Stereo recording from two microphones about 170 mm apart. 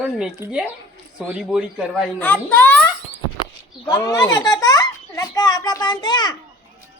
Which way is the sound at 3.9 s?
20° left (ahead or behind).